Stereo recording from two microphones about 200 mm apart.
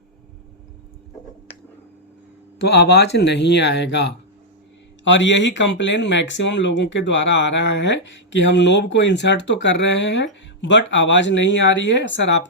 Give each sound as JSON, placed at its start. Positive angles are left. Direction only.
{"t": 2.6, "sound": "speech", "side_deg": 60}